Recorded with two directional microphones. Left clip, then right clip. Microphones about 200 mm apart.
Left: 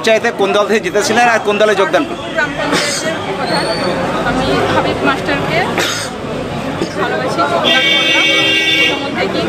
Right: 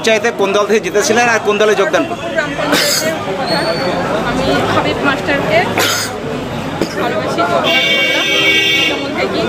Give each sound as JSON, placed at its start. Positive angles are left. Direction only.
{"t": 0.0, "sound": "speech", "side_deg": 0}
{"t": 4.8, "sound": "speech", "side_deg": 0}